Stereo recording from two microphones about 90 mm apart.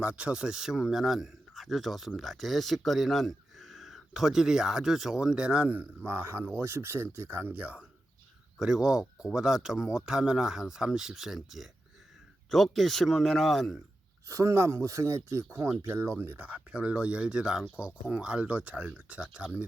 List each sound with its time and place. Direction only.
0.0 s speech: 15° right (ahead or behind)
6.1 s speech: 25° right (ahead or behind); by 13.7 s centre (ahead or behind)
14.3 s speech: 35° right (ahead or behind); by 19.6 s 10° right (ahead or behind)